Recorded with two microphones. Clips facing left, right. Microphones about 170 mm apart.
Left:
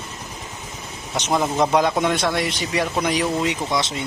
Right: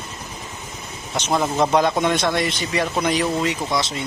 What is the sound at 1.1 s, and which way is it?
A man's voice, 10° left (ahead or behind).